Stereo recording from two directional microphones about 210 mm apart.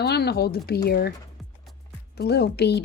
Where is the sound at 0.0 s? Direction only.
50° left (ahead or behind).